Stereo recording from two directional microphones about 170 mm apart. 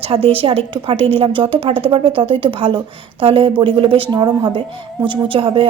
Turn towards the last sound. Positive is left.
turn(degrees=-30)  # may be behind; listen again after turning